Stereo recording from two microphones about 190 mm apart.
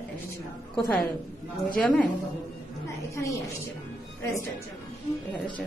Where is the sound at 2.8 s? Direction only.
15° left (ahead or behind).